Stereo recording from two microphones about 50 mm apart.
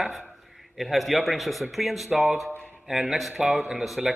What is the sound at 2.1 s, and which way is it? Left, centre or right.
Speech, right.